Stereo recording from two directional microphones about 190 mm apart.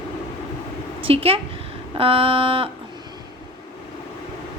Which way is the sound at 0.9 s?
30° right (ahead or behind).